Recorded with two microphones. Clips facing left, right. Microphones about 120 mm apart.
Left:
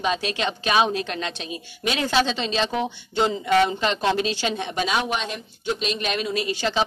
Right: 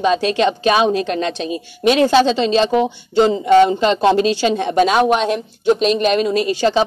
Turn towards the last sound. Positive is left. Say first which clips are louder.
# right 8 dB
turn(degrees=-40)  # may be behind; listen again after turning